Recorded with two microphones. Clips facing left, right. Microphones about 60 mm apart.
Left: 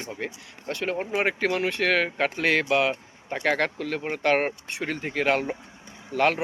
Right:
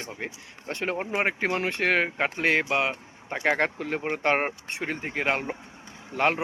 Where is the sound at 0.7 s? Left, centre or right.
Right.